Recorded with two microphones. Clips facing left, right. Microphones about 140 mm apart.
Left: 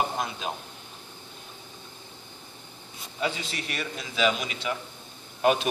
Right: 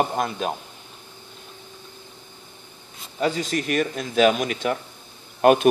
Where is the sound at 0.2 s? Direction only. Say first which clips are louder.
Right 6 dB; 55° right (ahead or behind).